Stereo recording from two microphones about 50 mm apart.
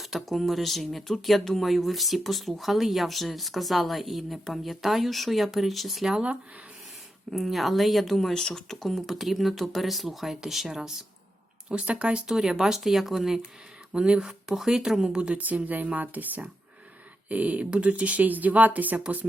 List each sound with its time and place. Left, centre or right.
0.0 s speech: centre
7.3 s speech: centre
11.7 s speech: right
12.3 s speech: centre
13.9 s speech: right
14.3 s speech: centre
15.4 s speech: right